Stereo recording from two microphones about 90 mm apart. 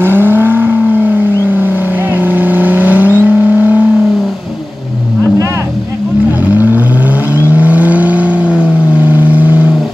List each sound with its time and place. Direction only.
0.0 s vehicle: 25° right (ahead or behind)
2.1 s vehicle: 20° right (ahead or behind)
6.5 s vehicle: 20° right (ahead or behind)